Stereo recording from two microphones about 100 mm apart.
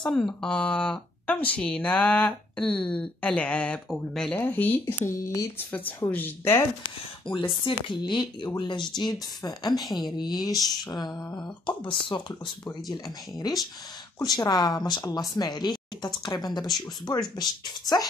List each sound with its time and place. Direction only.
0.0 s speech: 5° left (ahead or behind)
4.4 s speech: 20° left (ahead or behind)
7.3 s speech: 55° left (ahead or behind)
14.1 s speech: 40° left (ahead or behind)